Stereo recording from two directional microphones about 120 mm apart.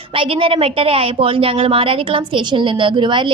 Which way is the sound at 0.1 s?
50° right (ahead or behind).